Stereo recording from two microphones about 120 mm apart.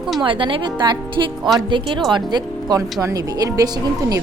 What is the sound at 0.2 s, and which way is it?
Speech, 45° right (ahead or behind).